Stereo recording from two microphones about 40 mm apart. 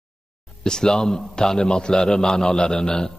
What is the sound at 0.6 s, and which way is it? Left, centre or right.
A man's voice, centre.